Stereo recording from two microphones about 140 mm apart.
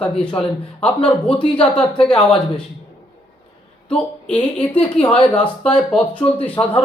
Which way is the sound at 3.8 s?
10° left (ahead or behind).